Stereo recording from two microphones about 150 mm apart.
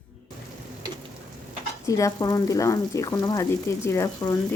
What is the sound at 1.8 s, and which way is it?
Stir, 20° left (ahead or behind).